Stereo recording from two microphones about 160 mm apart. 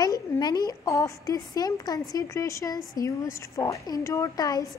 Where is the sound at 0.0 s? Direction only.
25° left (ahead or behind).